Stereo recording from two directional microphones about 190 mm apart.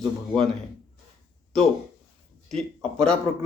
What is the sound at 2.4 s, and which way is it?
A man's voice, 5° left (ahead or behind).